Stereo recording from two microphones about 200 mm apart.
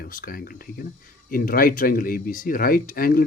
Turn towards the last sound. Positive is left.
turn(degrees=45)  # may be behind; listen again after turning